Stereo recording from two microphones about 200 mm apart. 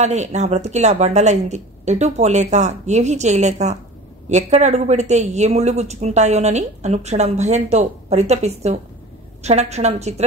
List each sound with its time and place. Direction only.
0.0 s a woman's voice: 35° right (ahead or behind)